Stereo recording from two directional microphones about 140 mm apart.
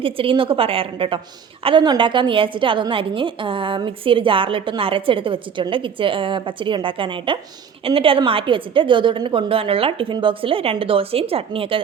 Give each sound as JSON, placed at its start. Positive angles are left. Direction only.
{"t": 0.0, "sound": "a woman's voice", "side_deg": -40}